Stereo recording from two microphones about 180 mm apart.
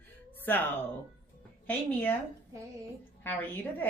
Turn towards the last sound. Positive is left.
turn(degrees=10)  # may be behind; listen again after turning